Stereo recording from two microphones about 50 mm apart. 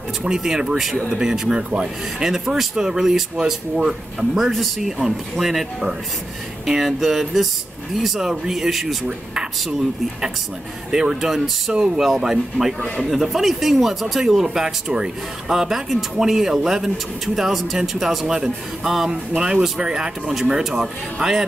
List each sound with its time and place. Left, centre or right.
0.2 s speech: centre
4.4 s speech: centre
10.9 s speech: centre
11.7 s speech: centre